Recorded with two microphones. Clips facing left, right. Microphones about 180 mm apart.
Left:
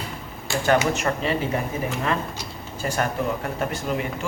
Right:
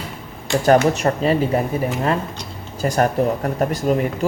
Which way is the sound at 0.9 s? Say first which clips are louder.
Right 6 dB; 35° right (ahead or behind).